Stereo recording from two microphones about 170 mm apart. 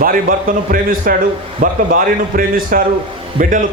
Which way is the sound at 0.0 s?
55° right (ahead or behind).